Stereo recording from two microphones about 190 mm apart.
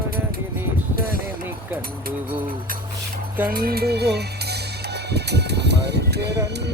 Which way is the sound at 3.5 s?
50° right (ahead or behind).